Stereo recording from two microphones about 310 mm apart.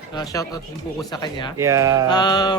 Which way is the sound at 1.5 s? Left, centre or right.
Centre.